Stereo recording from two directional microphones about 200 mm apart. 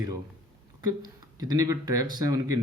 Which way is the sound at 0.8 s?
20° right (ahead or behind).